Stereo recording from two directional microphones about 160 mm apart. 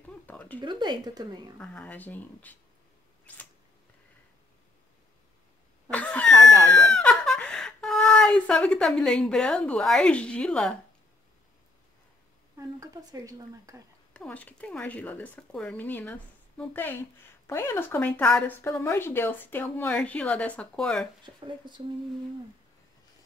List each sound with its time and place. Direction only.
0.3 s a sound: 10° left (ahead or behind)
0.6 s a woman's voice: 30° right (ahead or behind)
1.6 s speech: 5° left (ahead or behind)
5.9 s cough: 5° left (ahead or behind)
6.7 s a sound: 5° left (ahead or behind)
12.5 s a woman's voice: 20° right (ahead or behind)
14.1 s speech: 10° left (ahead or behind)
21.2 s a woman's voice: 30° right (ahead or behind)